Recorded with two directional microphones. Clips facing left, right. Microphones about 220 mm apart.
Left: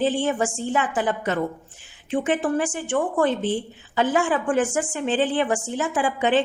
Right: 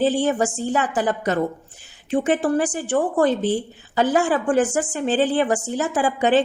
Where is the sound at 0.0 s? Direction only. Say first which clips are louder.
Right 3 dB; 40° right (ahead or behind).